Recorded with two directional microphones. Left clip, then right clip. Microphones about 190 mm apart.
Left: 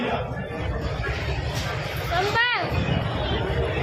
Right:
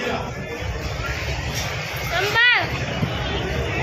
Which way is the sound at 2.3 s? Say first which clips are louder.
Right 8 dB; centre (ahead or behind).